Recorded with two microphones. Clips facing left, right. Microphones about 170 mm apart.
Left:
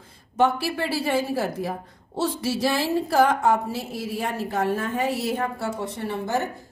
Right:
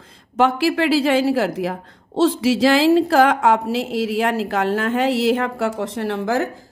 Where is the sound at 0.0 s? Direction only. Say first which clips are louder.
Right 3 dB; 90° right.